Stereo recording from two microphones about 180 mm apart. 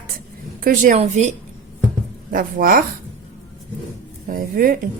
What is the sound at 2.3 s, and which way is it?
Speech, 50° right (ahead or behind).